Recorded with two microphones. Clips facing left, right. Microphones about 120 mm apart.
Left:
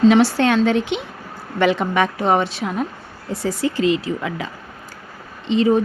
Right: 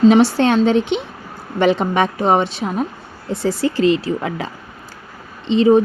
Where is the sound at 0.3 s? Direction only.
25° right (ahead or behind).